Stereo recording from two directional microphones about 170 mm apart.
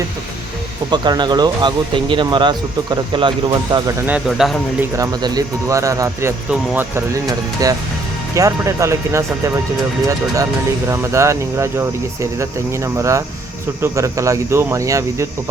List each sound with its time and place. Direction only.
0.9 s speech: 25° right (ahead or behind)
4.3 s speech: centre (ahead or behind)
4.8 s speech: 20° right (ahead or behind)
10.8 s speech: 15° right (ahead or behind)